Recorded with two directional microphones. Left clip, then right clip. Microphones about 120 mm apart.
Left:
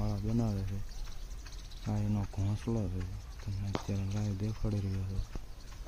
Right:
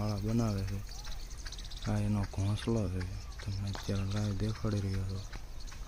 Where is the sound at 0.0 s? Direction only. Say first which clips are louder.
Right 2 dB; 10° left (ahead or behind).